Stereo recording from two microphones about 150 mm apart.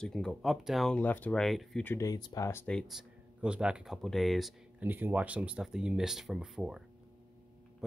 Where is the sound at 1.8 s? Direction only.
20° left (ahead or behind).